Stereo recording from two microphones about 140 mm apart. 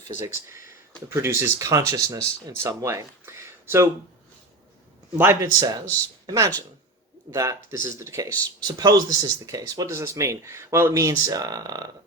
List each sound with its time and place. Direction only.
1.1 s speech: 20° right (ahead or behind)
5.1 s speech: 15° right (ahead or behind)